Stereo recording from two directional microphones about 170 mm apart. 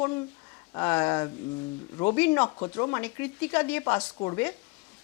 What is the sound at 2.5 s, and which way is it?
Speech, 20° left (ahead or behind).